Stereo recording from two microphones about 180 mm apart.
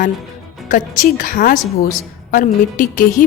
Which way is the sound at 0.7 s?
50° left (ahead or behind).